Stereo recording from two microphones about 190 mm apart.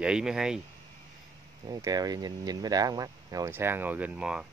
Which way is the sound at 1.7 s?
20° right (ahead or behind).